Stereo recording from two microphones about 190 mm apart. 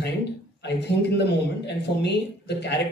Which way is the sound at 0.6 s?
65° left (ahead or behind).